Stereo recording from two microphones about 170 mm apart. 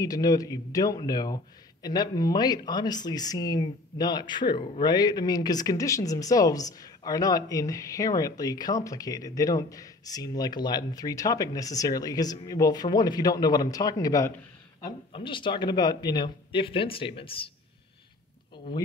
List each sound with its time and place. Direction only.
0.0 s a man's voice: 20° left (ahead or behind)